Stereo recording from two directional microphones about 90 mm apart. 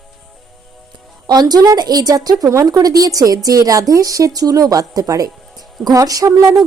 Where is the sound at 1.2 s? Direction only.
50° right (ahead or behind).